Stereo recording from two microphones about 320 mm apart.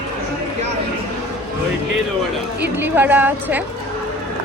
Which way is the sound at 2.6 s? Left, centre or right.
Centre.